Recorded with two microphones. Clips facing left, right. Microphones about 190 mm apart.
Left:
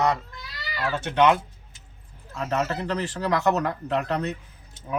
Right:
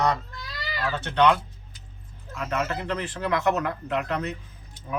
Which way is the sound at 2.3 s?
35° left (ahead or behind).